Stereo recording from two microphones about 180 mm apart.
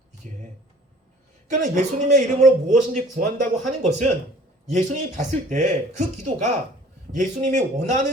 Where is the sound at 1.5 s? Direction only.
45° right (ahead or behind).